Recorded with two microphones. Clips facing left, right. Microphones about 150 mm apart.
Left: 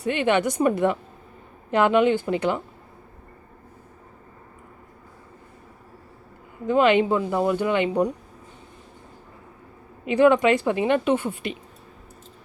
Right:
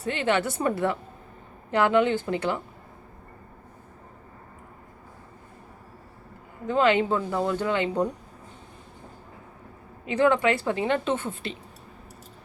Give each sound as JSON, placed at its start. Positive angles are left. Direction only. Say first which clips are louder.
{"t": 0.0, "sound": "a woman's voice", "louder": "left 4 dB", "side_deg": 15}
{"t": 6.7, "sound": "a woman's voice", "louder": "left 3 dB", "side_deg": 15}
{"t": 10.1, "sound": "a woman's voice", "louder": "left 5 dB", "side_deg": 15}